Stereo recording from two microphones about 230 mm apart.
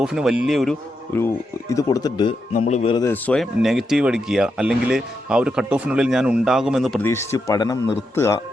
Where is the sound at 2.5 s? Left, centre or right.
Left.